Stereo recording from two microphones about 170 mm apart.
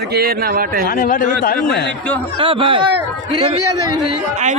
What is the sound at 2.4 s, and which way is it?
Speech, 30° right (ahead or behind).